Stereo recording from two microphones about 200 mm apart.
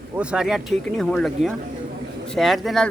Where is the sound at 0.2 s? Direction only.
5° right (ahead or behind).